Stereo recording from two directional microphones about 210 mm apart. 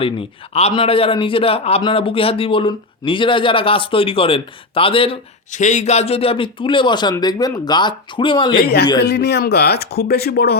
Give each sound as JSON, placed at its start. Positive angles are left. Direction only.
{"t": 0.0, "sound": "a man's voice", "side_deg": 30}
{"t": 8.5, "sound": "speech", "side_deg": 50}